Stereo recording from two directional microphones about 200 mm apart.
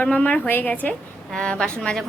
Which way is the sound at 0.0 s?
5° left (ahead or behind).